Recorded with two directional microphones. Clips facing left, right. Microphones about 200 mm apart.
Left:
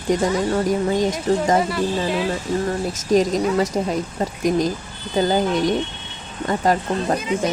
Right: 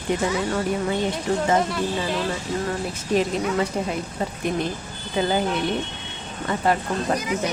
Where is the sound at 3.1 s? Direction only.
40° left (ahead or behind).